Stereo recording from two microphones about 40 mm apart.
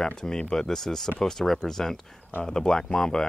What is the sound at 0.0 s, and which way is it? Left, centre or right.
Speech, centre.